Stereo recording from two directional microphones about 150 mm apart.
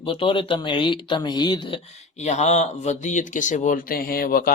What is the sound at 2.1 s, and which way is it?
Speech, 50° left (ahead or behind).